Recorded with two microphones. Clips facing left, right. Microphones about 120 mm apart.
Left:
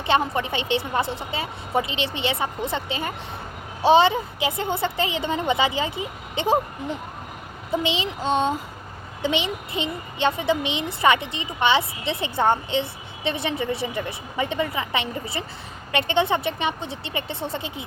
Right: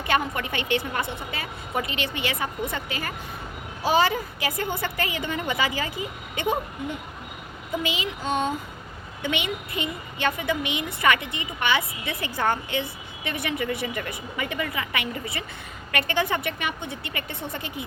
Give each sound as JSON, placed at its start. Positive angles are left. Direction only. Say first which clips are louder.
{"t": 0.0, "sound": "a woman's voice", "louder": "left 3 dB", "side_deg": 25}
{"t": 7.7, "sound": "a woman's voice", "louder": "left 4 dB", "side_deg": 30}